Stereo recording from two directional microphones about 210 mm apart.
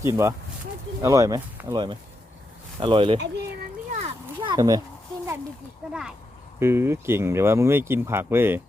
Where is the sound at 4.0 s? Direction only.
20° right (ahead or behind).